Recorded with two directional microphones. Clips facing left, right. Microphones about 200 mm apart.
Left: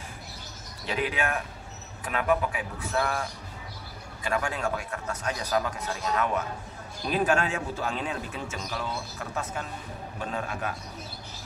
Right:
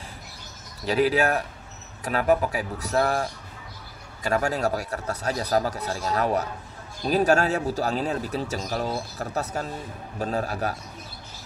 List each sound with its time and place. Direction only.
0.8 s speech: 35° right (ahead or behind)